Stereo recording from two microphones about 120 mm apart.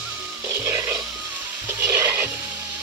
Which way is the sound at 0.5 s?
20° right (ahead or behind).